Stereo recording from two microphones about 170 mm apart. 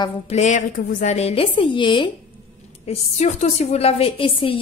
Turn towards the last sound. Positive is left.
turn(degrees=30)  # may be behind; listen again after turning